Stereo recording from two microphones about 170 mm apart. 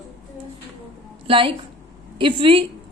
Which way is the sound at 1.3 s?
30° right (ahead or behind).